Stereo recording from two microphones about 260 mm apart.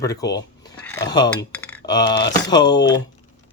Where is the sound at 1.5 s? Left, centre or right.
Centre.